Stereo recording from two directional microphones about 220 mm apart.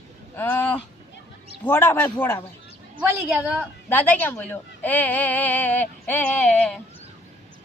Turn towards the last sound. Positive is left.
turn(degrees=5)  # may be behind; listen again after turning